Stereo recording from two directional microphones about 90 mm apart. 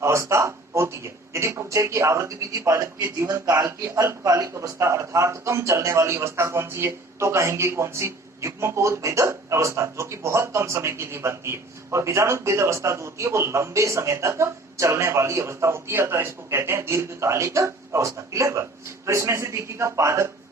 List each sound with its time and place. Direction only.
0.0 s a man's voice: 30° right (ahead or behind)